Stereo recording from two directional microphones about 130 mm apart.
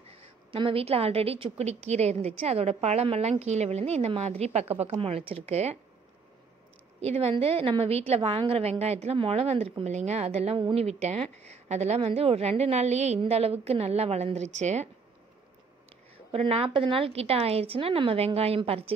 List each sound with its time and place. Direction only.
0.1 s a woman's voice: 45° right (ahead or behind)
7.0 s a woman's voice: 55° right (ahead or behind)
16.3 s a woman's voice: 50° right (ahead or behind)